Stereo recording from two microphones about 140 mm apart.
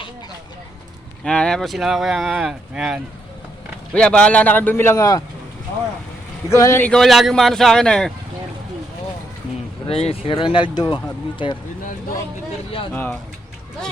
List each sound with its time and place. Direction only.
1.2 s speech: 5° left (ahead or behind)
3.9 s speech: 5° left (ahead or behind); by 5.2 s 25° left (ahead or behind)
6.5 s speech: 20° left (ahead or behind)
6.9 s speech: centre (ahead or behind)
9.8 s speech: 45° left (ahead or behind)